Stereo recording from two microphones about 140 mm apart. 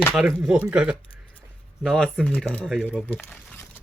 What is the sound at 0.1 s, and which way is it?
Speech, 5° right (ahead or behind).